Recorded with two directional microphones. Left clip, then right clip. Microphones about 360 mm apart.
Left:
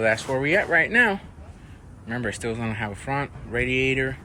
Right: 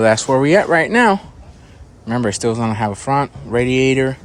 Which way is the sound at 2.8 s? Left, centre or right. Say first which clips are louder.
Right 11 dB; right.